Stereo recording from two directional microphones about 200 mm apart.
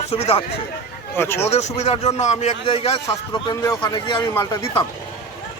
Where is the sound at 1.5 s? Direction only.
35° left (ahead or behind).